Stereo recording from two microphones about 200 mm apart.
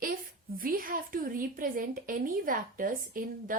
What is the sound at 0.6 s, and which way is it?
Speech, 45° right (ahead or behind).